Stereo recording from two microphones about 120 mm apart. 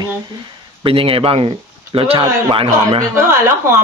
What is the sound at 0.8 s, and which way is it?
Speech, 50° right (ahead or behind).